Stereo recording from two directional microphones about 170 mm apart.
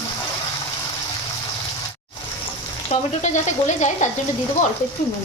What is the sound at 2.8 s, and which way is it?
Speech, 45° left (ahead or behind).